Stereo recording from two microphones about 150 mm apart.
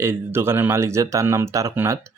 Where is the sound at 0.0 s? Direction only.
15° right (ahead or behind).